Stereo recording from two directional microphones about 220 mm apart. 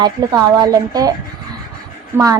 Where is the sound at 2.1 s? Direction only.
15° right (ahead or behind).